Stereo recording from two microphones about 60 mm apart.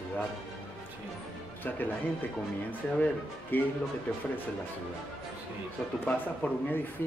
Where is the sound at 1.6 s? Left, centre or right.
Left.